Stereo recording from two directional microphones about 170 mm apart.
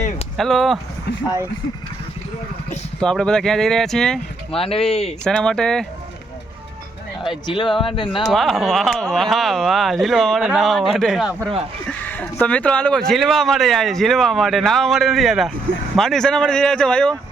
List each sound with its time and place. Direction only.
0.3 s speech: centre (ahead or behind)
3.0 s speech: 5° left (ahead or behind)
4.5 s speech: 35° left (ahead or behind)
5.2 s speech: 5° left (ahead or behind)
7.4 s speech: 30° left (ahead or behind)
8.3 s speech: centre (ahead or behind)
11.9 s speech: 10° left (ahead or behind)